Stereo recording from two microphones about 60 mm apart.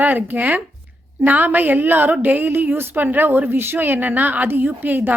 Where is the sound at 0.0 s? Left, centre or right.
Right.